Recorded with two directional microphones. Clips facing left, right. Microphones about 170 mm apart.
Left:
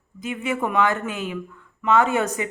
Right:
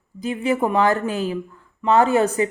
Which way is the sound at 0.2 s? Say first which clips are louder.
Right 5 dB; 35° right (ahead or behind).